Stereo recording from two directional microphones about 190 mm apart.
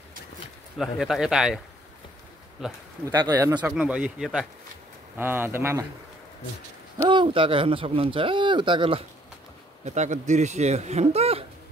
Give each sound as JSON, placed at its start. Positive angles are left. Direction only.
{"t": 0.7, "sound": "a man's voice", "side_deg": 0}
{"t": 2.6, "sound": "a man's voice", "side_deg": -5}
{"t": 3.1, "sound": "a man's voice", "side_deg": -15}
{"t": 7.1, "sound": "speech", "side_deg": -25}
{"t": 9.8, "sound": "speech", "side_deg": -40}